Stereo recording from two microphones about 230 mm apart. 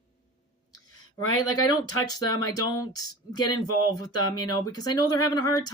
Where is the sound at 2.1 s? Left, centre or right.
Centre.